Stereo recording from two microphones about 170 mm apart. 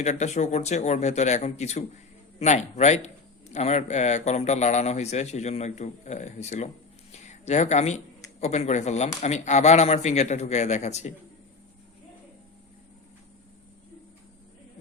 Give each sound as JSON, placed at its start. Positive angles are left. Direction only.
{"t": 0.0, "sound": "speech", "side_deg": 40}